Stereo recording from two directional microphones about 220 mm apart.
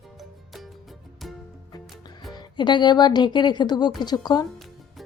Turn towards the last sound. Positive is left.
turn(degrees=20)  # may be behind; listen again after turning